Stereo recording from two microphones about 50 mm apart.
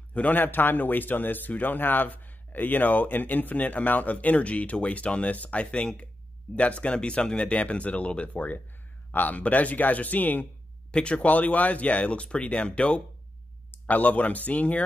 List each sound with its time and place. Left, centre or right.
0.1 s speech: left
10.9 s speech: left
13.8 s speech: left